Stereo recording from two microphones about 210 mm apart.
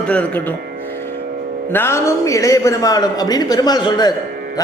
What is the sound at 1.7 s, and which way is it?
Speech, 10° left (ahead or behind).